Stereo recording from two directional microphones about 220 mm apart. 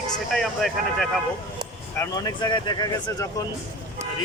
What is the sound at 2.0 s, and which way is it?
Speech, 15° left (ahead or behind).